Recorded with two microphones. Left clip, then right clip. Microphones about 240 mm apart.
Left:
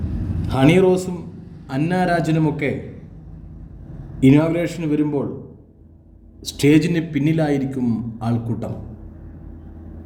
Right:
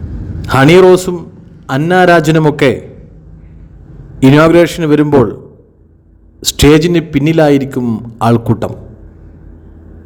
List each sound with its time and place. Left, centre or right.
0.4 s a man's voice: right
4.2 s a man's voice: right
6.4 s a man's voice: right